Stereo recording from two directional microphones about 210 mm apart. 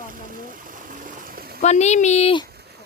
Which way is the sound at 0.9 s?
40° right (ahead or behind).